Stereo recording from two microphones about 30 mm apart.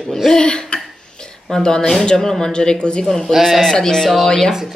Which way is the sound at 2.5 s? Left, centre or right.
Left.